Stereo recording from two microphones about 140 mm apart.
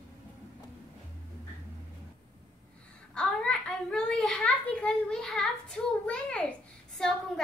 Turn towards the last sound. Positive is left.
turn(degrees=5)  # may be behind; listen again after turning